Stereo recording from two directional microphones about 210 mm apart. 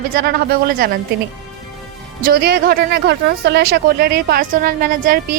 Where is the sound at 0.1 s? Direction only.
45° right (ahead or behind).